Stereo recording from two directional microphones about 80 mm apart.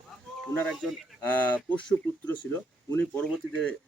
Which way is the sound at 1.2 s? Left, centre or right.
Centre.